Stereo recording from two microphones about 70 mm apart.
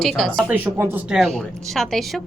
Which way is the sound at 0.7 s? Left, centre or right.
Right.